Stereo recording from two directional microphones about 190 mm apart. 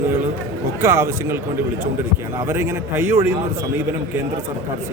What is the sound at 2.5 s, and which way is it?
Speech, 15° right (ahead or behind).